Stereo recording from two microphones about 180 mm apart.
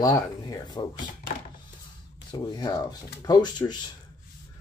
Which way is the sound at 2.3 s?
25° left (ahead or behind).